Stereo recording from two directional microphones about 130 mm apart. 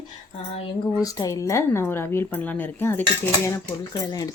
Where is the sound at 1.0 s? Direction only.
25° left (ahead or behind).